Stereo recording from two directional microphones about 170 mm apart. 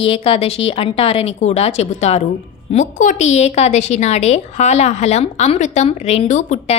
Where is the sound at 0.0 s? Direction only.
35° left (ahead or behind).